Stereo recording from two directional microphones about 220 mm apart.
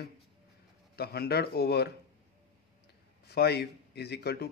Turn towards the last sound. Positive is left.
turn(degrees=45)  # may be behind; listen again after turning